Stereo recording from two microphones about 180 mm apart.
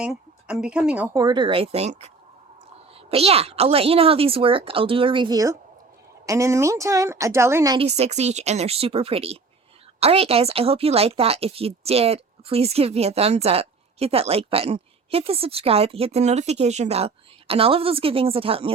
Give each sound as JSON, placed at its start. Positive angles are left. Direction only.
{"t": 0.0, "sound": "a woman's voice", "side_deg": -5}
{"t": 1.1, "sound": "speech", "side_deg": -20}
{"t": 3.1, "sound": "speech", "side_deg": -35}
{"t": 7.8, "sound": "speech", "side_deg": -35}